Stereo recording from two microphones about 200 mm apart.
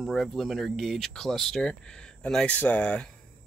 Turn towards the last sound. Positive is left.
turn(degrees=5)  # may be behind; listen again after turning